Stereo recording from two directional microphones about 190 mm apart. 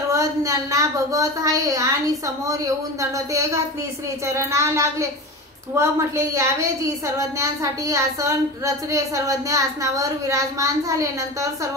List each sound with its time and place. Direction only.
0.1 s a woman's voice: 15° right (ahead or behind)